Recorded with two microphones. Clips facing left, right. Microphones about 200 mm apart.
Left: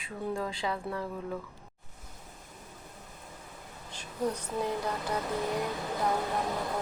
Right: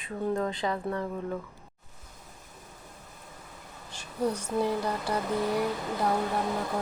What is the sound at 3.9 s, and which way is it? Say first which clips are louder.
Speech: right 3 dB; 10° right (ahead or behind).